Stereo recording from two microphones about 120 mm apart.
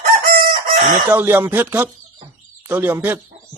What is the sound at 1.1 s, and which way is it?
A man's voice, 20° right (ahead or behind).